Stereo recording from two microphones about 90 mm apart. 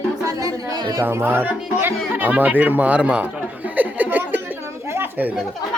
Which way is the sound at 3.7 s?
20° right (ahead or behind).